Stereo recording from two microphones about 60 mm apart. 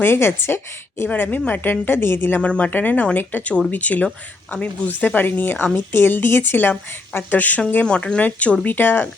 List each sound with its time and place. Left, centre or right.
0.0 s a woman's voice: left
1.1 s a woman's voice: left
2.4 s a woman's voice: left
7.9 s speech: centre
8.6 s a woman's voice: left